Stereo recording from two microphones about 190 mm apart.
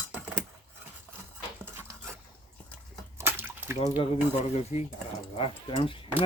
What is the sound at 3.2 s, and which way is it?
Bathtub, 10° right (ahead or behind).